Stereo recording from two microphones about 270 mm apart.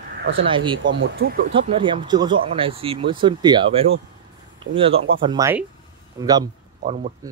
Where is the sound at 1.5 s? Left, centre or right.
Centre.